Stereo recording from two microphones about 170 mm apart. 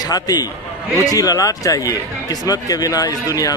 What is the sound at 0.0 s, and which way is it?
A man's voice, 20° left (ahead or behind).